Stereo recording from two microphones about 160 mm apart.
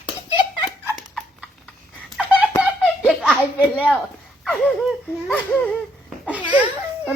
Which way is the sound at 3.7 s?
5° left (ahead or behind).